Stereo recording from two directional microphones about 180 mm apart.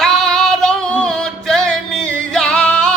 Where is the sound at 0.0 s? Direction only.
Centre (ahead or behind).